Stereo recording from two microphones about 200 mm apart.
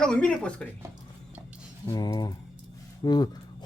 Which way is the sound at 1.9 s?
15° left (ahead or behind).